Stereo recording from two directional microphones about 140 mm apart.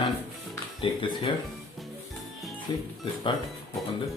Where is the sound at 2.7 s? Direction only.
35° left (ahead or behind).